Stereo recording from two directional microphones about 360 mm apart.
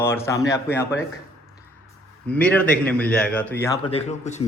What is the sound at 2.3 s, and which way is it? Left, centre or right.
A man's voice, centre.